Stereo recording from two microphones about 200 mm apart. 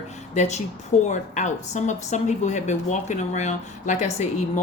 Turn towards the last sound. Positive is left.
turn(degrees=35)  # may be behind; listen again after turning